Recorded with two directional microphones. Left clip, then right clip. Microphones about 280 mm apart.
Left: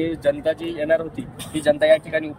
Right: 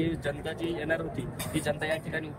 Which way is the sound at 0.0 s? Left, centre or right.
Left.